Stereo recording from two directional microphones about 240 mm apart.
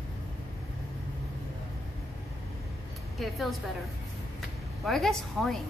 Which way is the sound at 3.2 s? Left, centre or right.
Centre.